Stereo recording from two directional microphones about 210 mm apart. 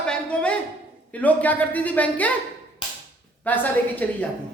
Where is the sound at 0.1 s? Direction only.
5° left (ahead or behind).